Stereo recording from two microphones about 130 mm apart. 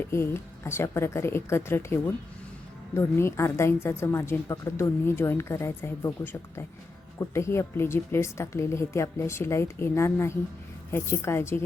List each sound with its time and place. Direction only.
0.0 s a woman's voice: 20° left (ahead or behind)